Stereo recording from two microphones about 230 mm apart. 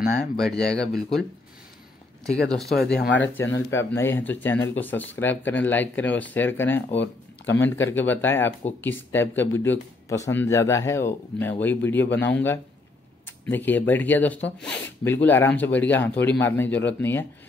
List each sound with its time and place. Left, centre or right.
0.4 s speech: centre
2.2 s speech: centre
3.0 s speech: left
3.5 s speech: centre